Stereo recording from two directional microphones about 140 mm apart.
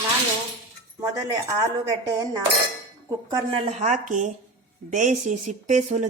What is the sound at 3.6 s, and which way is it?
Speech, 50° right (ahead or behind).